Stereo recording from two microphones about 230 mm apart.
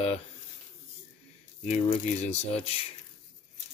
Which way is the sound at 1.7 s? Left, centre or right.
Left.